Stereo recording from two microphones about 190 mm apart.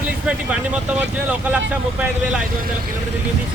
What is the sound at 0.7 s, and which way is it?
Speech, 5° right (ahead or behind).